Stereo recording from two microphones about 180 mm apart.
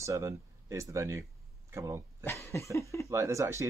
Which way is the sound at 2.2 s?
15° left (ahead or behind).